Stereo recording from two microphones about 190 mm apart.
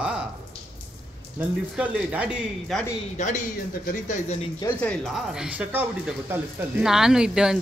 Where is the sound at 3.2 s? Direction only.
35° left (ahead or behind).